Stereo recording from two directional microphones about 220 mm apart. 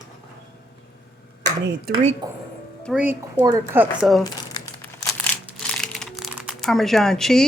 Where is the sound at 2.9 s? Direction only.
10° right (ahead or behind).